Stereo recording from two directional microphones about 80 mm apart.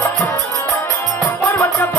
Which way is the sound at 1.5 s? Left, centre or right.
Left.